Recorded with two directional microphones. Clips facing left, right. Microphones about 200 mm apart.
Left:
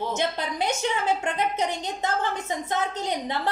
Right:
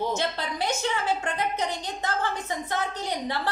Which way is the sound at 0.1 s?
20° left (ahead or behind).